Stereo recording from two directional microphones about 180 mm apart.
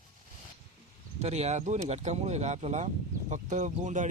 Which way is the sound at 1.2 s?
35° right (ahead or behind).